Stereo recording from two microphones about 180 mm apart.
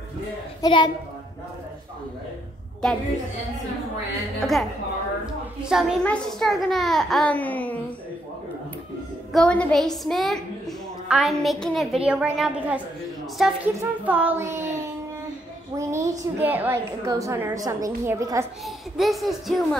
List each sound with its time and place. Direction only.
0.6 s a child's voice: 25° left (ahead or behind)
2.8 s a child's voice: 5° left (ahead or behind)
4.4 s a child's voice: centre (ahead or behind)
9.3 s a child's voice: 5° left (ahead or behind); by 14.7 s 15° right (ahead or behind)
15.7 s a woman's voice: 15° right (ahead or behind)
18.9 s a child's voice: centre (ahead or behind)